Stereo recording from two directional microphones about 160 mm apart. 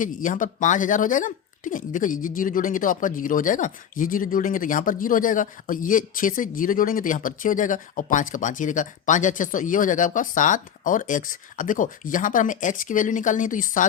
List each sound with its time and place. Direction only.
0.0 s speech: 55° left (ahead or behind)